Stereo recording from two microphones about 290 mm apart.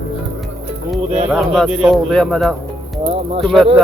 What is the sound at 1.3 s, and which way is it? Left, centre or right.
Speech, centre.